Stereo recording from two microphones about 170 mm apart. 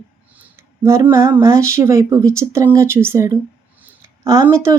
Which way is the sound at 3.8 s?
15° right (ahead or behind).